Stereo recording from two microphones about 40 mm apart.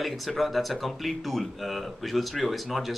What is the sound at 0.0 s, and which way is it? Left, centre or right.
Speech, centre.